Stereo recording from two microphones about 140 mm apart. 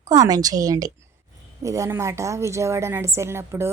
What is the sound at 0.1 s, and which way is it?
A woman's voice, 25° right (ahead or behind).